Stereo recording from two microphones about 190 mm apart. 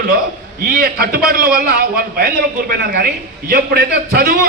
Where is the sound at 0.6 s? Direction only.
50° right (ahead or behind).